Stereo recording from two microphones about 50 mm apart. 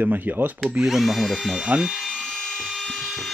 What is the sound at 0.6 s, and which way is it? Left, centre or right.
Speech, centre.